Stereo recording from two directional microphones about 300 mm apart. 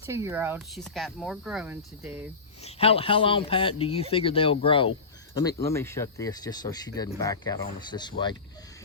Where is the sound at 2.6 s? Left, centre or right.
Centre.